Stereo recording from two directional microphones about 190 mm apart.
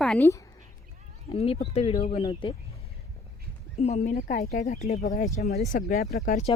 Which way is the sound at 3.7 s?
35° left (ahead or behind).